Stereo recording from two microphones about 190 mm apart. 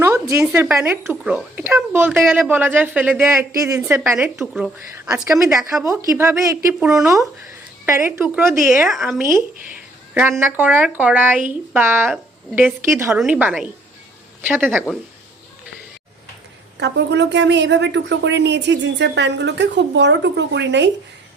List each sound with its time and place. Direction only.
0.0 s speech: 15° right (ahead or behind)
4.2 s speech: 5° right (ahead or behind)
4.9 s speech: 15° right (ahead or behind)
6.7 s speech: 5° right (ahead or behind)
7.1 s speech: 15° right (ahead or behind)
10.4 s speech: 10° right (ahead or behind)
16.7 s speech: 65° right (ahead or behind)